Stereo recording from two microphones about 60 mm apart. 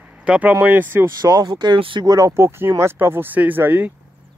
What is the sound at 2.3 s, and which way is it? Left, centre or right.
Speech, right.